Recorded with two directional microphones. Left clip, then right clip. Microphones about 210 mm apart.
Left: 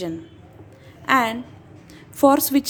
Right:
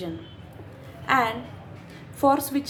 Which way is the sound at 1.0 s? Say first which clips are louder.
Left 3 dB; 50° left (ahead or behind).